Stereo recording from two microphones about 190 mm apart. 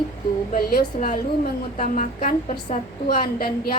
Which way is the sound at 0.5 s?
45° left (ahead or behind).